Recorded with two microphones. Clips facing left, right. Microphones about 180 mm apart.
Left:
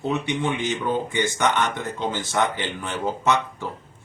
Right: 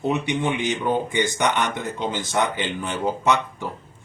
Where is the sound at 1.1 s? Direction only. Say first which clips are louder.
Right 1 dB; 15° right (ahead or behind).